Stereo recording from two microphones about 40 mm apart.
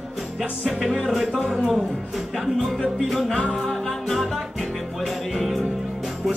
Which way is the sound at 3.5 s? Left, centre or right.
Centre.